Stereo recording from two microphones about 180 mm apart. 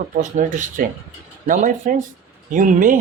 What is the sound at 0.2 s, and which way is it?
Speech, 45° right (ahead or behind).